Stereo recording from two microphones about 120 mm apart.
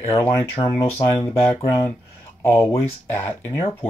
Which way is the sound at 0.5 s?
45° left (ahead or behind).